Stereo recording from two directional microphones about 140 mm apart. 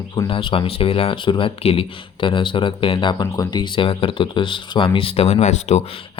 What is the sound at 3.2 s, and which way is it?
Speech, 30° left (ahead or behind).